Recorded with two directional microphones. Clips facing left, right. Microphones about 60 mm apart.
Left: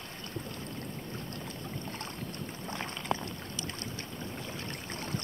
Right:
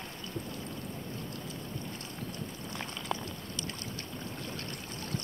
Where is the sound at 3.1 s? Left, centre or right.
Centre.